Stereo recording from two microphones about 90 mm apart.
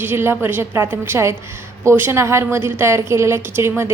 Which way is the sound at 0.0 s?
25° right (ahead or behind).